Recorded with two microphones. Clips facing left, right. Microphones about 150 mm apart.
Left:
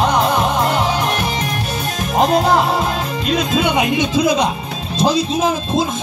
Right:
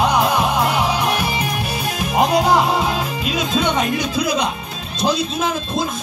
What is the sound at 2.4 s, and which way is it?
Music, centre (ahead or behind).